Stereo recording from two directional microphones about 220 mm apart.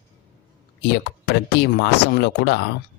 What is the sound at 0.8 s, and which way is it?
Speech, 50° left (ahead or behind).